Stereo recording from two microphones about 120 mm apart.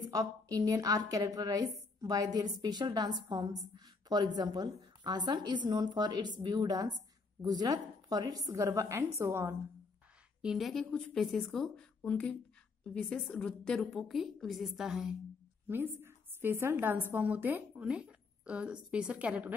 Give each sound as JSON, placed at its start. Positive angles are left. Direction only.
{"t": 0.1, "sound": "a woman's voice", "side_deg": -30}
{"t": 10.4, "sound": "a woman's voice", "side_deg": 0}
{"t": 15.7, "sound": "a woman's voice", "side_deg": -20}